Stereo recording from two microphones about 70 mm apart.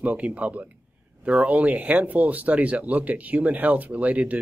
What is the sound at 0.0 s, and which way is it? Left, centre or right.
Speech, right.